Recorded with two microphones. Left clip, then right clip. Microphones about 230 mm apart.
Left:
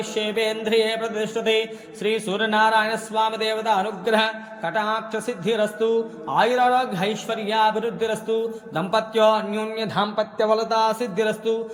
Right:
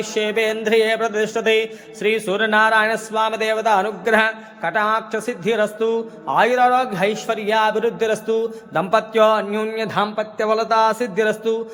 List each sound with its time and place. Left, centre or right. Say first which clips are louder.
0.0 s music: right 4 dB; centre